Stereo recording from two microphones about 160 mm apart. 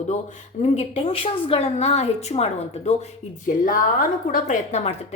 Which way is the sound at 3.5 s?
55° left (ahead or behind).